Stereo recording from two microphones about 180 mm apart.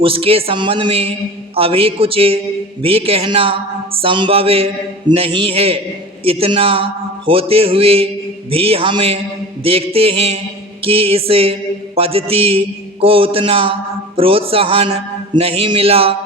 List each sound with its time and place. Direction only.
0.0 s a man's voice: 30° right (ahead or behind)